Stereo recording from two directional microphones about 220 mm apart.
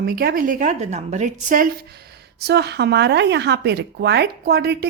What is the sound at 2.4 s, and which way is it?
Speech, 50° right (ahead or behind).